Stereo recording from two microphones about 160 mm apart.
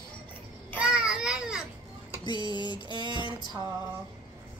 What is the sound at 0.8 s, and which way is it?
Speech, 5° right (ahead or behind).